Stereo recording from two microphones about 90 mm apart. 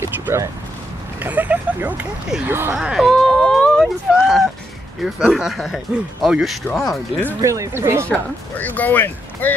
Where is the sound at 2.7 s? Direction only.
5° right (ahead or behind).